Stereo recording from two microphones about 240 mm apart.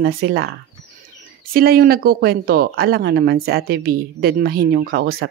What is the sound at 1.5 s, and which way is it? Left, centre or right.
Speech, right.